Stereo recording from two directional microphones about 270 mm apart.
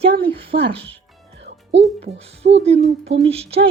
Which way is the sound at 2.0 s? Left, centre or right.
Right.